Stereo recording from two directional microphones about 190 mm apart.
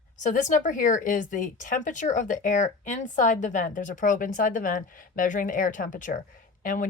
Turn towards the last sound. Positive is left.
turn(degrees=45)  # may be behind; listen again after turning